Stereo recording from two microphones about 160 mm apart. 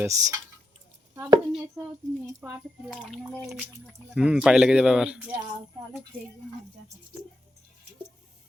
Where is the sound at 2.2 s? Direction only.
15° right (ahead or behind).